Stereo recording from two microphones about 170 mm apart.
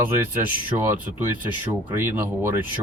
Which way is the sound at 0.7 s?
30° right (ahead or behind).